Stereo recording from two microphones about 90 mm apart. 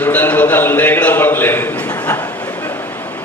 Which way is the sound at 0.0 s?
20° left (ahead or behind).